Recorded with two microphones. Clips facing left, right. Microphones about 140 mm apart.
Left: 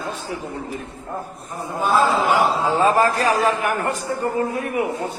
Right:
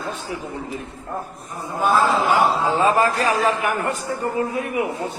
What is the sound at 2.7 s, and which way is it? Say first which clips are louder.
A man's voice: left 1 dB; 40° left (ahead or behind).